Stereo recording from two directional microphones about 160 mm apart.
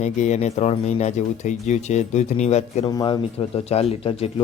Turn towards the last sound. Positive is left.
turn(degrees=35)  # may be behind; listen again after turning